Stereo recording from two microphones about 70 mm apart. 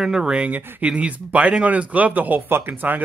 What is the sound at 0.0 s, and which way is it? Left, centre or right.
Speech, centre.